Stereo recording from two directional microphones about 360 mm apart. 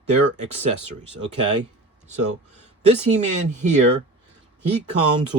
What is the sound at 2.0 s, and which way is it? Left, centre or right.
Speech, centre.